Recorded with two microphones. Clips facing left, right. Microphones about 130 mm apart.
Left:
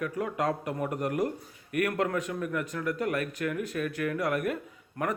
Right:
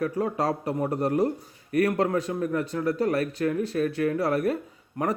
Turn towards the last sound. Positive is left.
turn(degrees=-20)  # may be behind; listen again after turning